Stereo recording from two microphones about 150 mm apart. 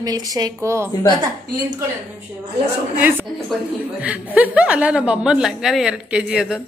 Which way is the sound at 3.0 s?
15° right (ahead or behind).